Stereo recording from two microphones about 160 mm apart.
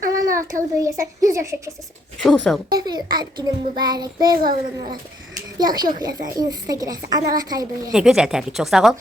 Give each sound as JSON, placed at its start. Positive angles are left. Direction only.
{"t": 0.1, "sound": "a child's voice", "side_deg": -20}
{"t": 2.2, "sound": "a woman's voice", "side_deg": 5}
{"t": 2.6, "sound": "a woman's voice", "side_deg": -25}
{"t": 5.5, "sound": "a woman's voice", "side_deg": -25}
{"t": 7.9, "sound": "a woman's voice", "side_deg": -5}